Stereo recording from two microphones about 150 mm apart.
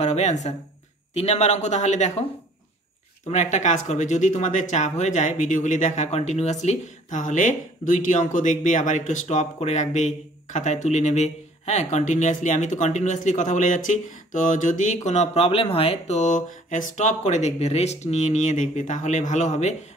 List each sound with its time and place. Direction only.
0.0 s speech: 50° left (ahead or behind)
3.3 s speech: 55° left (ahead or behind)